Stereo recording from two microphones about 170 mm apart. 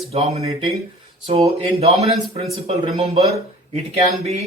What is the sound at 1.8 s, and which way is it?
Speech, 40° right (ahead or behind).